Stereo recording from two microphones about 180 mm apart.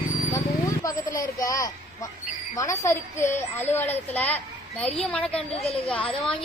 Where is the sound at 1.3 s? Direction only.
20° left (ahead or behind).